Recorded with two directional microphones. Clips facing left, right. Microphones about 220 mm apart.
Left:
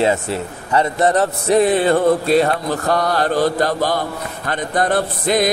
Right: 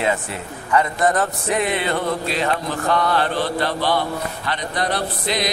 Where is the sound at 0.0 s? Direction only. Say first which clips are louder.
Left 5 dB; 30° left (ahead or behind).